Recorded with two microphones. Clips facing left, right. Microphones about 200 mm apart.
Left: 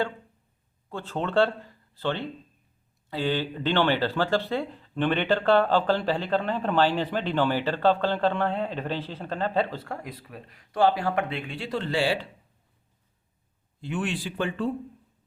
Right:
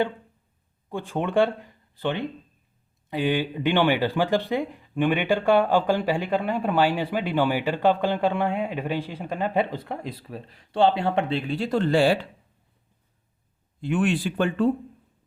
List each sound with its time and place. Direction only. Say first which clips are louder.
0.9 s speech: right 3 dB; 15° right (ahead or behind); by 12.2 s 50° right (ahead or behind)
13.8 s speech: right 7 dB; 55° right (ahead or behind)